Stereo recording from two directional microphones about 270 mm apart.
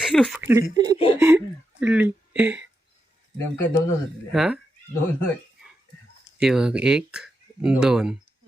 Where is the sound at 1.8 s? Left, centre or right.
Centre.